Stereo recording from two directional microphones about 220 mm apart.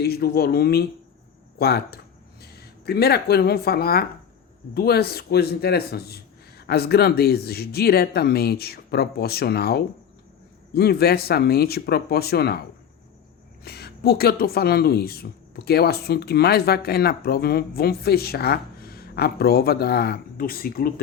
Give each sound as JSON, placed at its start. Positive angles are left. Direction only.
{"t": 0.0, "sound": "a woman's voice", "side_deg": 45}
{"t": 13.7, "sound": "a woman's voice", "side_deg": 45}